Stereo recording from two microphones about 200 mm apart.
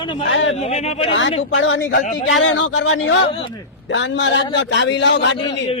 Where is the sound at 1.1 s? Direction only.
70° left (ahead or behind).